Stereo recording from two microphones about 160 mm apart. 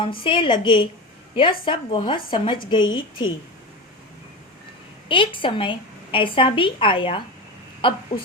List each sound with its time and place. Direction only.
0.3 s a woman's voice: 30° left (ahead or behind)
5.0 s a woman's voice: 30° left (ahead or behind)